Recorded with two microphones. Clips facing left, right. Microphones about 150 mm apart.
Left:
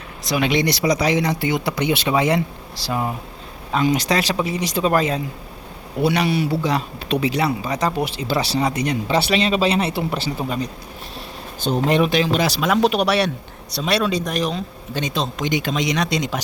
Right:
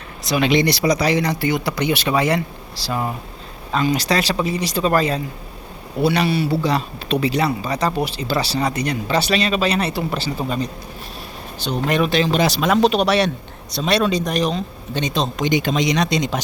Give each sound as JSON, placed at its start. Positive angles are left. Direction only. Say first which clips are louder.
{"t": 0.3, "sound": "a man's voice", "louder": "right 2 dB", "side_deg": 10}
{"t": 11.9, "sound": "speech", "louder": "left 1 dB", "side_deg": 25}
{"t": 12.1, "sound": "a man's voice", "louder": "right 1 dB", "side_deg": 5}